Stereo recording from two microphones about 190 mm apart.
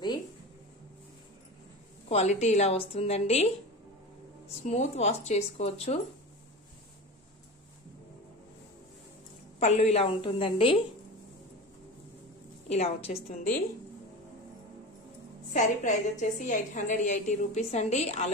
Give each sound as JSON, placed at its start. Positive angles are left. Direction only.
{"t": 2.0, "sound": "a woman's voice", "side_deg": 35}
{"t": 4.6, "sound": "a woman's voice", "side_deg": 35}
{"t": 9.6, "sound": "a woman's voice", "side_deg": 35}
{"t": 12.6, "sound": "a woman's voice", "side_deg": 35}
{"t": 15.5, "sound": "a woman's voice", "side_deg": 40}